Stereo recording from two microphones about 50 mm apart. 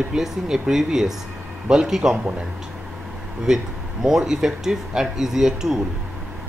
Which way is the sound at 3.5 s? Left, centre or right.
Centre.